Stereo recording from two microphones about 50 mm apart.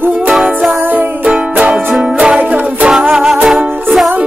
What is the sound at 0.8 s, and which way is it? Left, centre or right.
Music, right.